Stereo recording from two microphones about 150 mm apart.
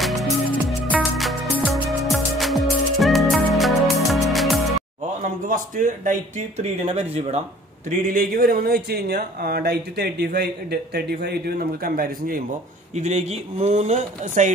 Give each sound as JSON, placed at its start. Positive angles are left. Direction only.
{"t": 0.0, "sound": "music", "side_deg": 0}
{"t": 5.2, "sound": "a man's voice", "side_deg": -60}
{"t": 6.9, "sound": "speech", "side_deg": -45}
{"t": 8.1, "sound": "speech", "side_deg": -70}
{"t": 12.9, "sound": "speech", "side_deg": -50}